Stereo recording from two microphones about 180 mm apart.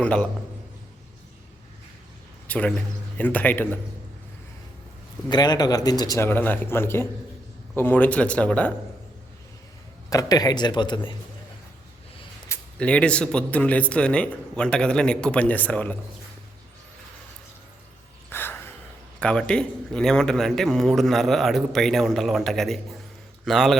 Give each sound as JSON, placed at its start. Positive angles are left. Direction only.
{"t": 0.0, "sound": "speech", "side_deg": 5}
{"t": 2.5, "sound": "speech", "side_deg": 5}
{"t": 5.3, "sound": "speech", "side_deg": 25}
{"t": 10.1, "sound": "speech", "side_deg": 20}
{"t": 12.5, "sound": "speech", "side_deg": 5}
{"t": 18.3, "sound": "gasp", "side_deg": 10}
{"t": 19.2, "sound": "speech", "side_deg": 5}